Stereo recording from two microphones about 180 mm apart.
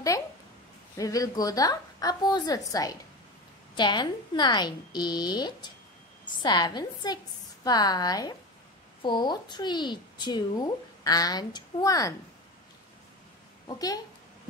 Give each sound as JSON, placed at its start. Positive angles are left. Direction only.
{"t": 0.9, "sound": "a child's voice", "side_deg": 20}
{"t": 13.7, "sound": "a child's voice", "side_deg": 20}